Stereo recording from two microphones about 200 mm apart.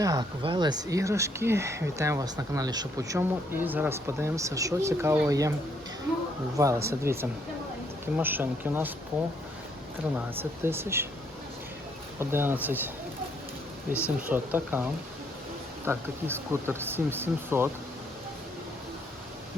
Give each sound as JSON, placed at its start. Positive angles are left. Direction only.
{"t": 0.0, "sound": "speech", "side_deg": -15}
{"t": 6.6, "sound": "speech", "side_deg": -15}
{"t": 10.3, "sound": "speech", "side_deg": -10}
{"t": 12.2, "sound": "speech", "side_deg": -10}